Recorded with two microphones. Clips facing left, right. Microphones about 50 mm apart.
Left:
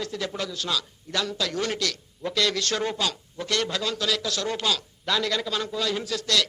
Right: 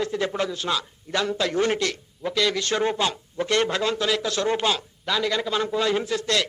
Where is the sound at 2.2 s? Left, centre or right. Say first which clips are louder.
Right 2 dB; centre; by 4.8 s right.